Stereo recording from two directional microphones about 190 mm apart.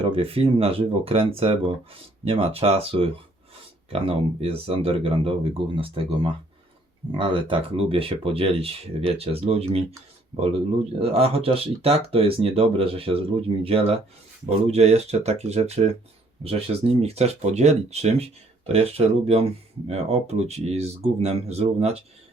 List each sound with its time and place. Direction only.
0.0 s speech: 30° right (ahead or behind)
11.0 s speech: 30° right (ahead or behind)